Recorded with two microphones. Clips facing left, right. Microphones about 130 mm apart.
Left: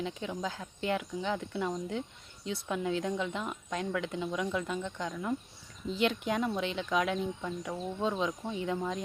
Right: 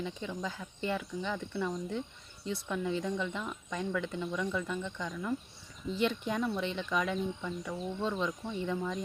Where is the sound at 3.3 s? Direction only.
25° left (ahead or behind).